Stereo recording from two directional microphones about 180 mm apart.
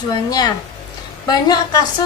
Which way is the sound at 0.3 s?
20° left (ahead or behind).